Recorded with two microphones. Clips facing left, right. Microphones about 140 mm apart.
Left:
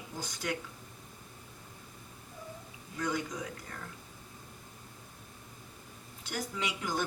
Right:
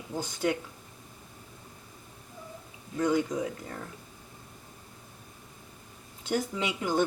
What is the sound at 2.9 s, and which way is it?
Speech, 25° right (ahead or behind).